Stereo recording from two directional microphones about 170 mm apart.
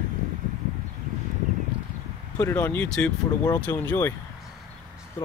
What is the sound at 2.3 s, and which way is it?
Speech, 15° left (ahead or behind).